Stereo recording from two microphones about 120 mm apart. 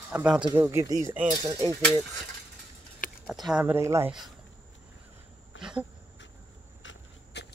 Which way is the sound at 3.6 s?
25° right (ahead or behind).